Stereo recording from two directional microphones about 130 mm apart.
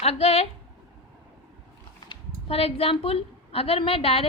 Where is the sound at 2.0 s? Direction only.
45° left (ahead or behind).